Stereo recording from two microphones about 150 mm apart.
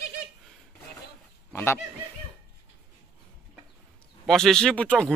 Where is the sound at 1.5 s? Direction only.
15° left (ahead or behind).